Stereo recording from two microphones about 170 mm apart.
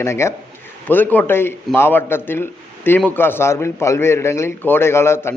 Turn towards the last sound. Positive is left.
turn(degrees=15)  # may be behind; listen again after turning